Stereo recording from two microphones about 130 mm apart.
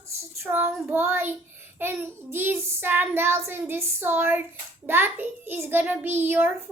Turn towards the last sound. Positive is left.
turn(degrees=-15)  # may be behind; listen again after turning